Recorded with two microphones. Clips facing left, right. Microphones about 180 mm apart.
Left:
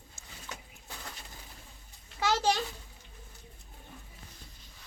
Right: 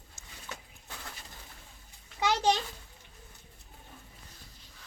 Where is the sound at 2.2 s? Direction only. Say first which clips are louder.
Right 1 dB; 15° right (ahead or behind).